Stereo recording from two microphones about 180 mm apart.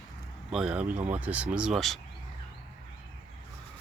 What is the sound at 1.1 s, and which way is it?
Speech, 10° right (ahead or behind).